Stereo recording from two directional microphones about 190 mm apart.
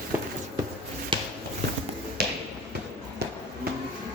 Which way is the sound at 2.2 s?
55° right (ahead or behind).